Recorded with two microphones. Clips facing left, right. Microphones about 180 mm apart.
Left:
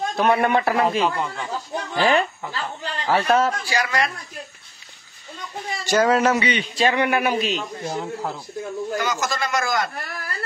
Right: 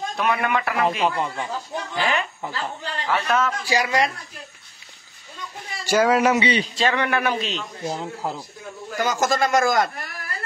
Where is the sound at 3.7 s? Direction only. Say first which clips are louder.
Right 2 dB; 15° right (ahead or behind).